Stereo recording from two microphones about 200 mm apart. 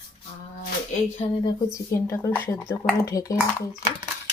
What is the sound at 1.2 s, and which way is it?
Speech, 25° left (ahead or behind).